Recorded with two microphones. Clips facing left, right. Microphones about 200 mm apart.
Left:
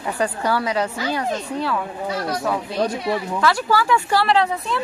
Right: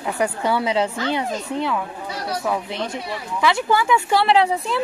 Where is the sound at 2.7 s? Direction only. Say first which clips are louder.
Left 6 dB; 20° right (ahead or behind).